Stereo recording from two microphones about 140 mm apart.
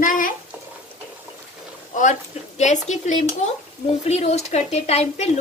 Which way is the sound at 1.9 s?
65° left (ahead or behind).